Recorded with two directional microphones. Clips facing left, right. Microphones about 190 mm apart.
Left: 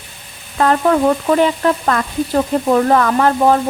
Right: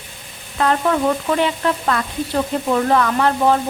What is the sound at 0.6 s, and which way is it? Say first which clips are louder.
Speech: left 4 dB; 45° left (ahead or behind).